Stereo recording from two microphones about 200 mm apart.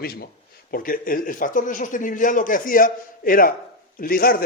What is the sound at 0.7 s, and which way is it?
A man's voice, 45° left (ahead or behind).